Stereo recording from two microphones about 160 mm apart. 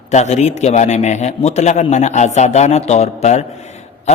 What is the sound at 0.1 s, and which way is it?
A man's voice, 45° left (ahead or behind).